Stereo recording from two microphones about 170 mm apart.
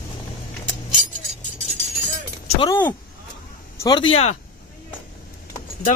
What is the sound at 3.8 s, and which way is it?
Speech, 25° left (ahead or behind).